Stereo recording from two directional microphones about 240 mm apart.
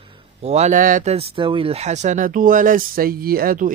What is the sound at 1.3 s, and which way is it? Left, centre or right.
Speech, right.